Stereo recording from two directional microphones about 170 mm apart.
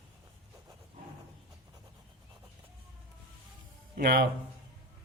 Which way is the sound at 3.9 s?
60° right (ahead or behind).